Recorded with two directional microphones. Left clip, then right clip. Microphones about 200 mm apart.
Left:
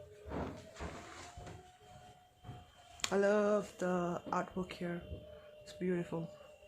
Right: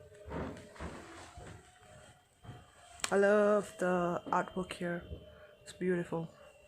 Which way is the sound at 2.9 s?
Centre (ahead or behind).